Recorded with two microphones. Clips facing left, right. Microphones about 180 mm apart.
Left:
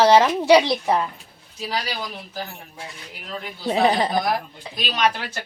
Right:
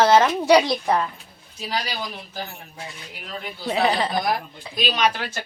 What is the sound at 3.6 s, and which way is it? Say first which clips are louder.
Speech: left 2 dB; 30° left (ahead or behind).